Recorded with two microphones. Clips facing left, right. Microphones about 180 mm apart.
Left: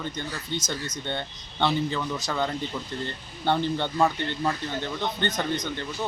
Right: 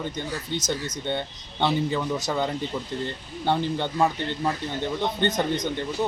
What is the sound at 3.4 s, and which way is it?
Speech, 10° right (ahead or behind).